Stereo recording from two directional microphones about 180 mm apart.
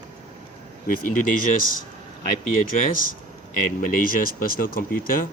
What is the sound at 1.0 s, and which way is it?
Speech, 50° left (ahead or behind).